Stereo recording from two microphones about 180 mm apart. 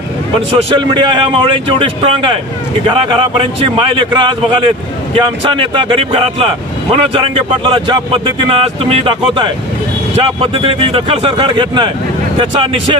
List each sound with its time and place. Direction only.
0.5 s speech: 30° right (ahead or behind)